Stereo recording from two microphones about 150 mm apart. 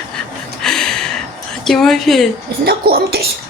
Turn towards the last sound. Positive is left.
turn(degrees=-90)